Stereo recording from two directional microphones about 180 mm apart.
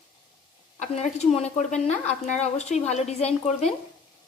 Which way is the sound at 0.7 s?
40° left (ahead or behind).